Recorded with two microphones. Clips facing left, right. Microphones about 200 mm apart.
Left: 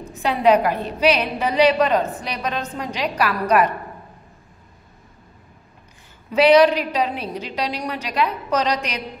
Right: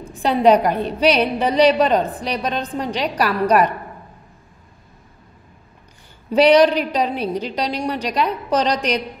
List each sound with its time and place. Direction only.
0.1 s a woman's voice: 30° right (ahead or behind)
6.3 s a woman's voice: 35° right (ahead or behind)